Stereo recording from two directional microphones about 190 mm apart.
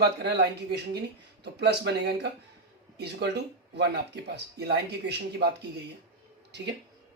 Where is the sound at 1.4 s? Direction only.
60° right (ahead or behind).